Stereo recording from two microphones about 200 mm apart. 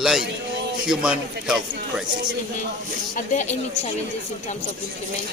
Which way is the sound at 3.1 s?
40° left (ahead or behind).